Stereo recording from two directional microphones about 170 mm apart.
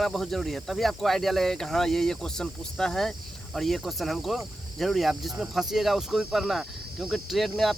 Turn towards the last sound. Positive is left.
turn(degrees=0)  # may be behind; listen again after turning